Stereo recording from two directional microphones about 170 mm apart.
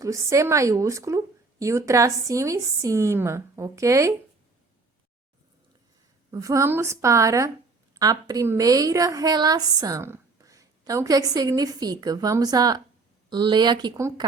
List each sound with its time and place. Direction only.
0.0 s speech: 20° right (ahead or behind)
6.3 s a woman's voice: 20° right (ahead or behind)